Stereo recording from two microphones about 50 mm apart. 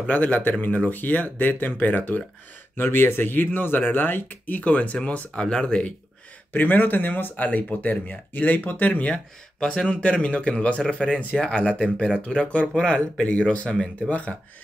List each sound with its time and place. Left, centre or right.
0.0 s speech: left
2.8 s speech: left; by 5.9 s centre
6.5 s speech: left
9.6 s speech: centre
12.2 s speech: left
14.0 s speech: left